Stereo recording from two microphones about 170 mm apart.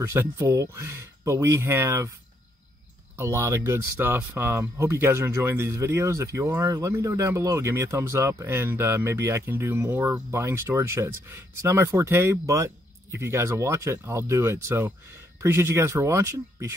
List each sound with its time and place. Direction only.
0.0 s speech: 15° right (ahead or behind)
3.2 s speech: 15° right (ahead or behind)